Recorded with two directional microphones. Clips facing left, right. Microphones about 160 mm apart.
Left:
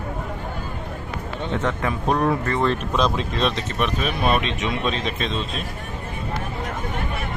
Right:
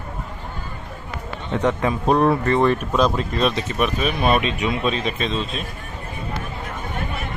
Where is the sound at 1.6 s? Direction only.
15° right (ahead or behind); by 5.6 s centre (ahead or behind).